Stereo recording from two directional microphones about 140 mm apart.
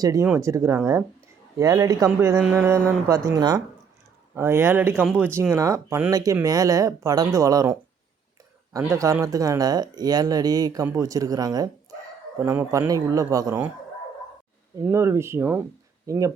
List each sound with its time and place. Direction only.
0.0 s speech: 25° right (ahead or behind)
8.8 s speech: 20° right (ahead or behind)
14.8 s speech: 20° right (ahead or behind)